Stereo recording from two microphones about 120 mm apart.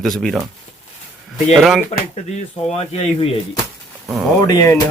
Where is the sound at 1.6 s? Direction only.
Centre (ahead or behind).